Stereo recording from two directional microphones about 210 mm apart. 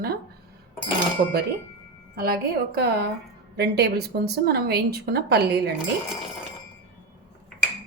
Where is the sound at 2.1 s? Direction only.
45° right (ahead or behind).